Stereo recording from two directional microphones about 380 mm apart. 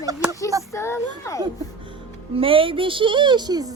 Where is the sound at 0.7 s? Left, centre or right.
Centre.